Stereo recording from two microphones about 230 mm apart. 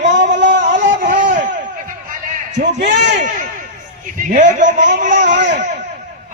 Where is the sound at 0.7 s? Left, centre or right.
Right.